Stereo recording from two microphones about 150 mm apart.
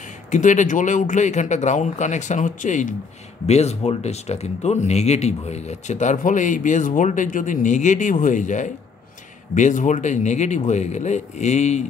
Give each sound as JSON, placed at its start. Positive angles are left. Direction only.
{"t": 0.3, "sound": "speech", "side_deg": 55}
{"t": 3.4, "sound": "speech", "side_deg": 45}